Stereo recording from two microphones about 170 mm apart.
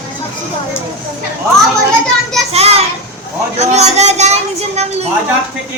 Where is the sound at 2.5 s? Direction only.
35° right (ahead or behind).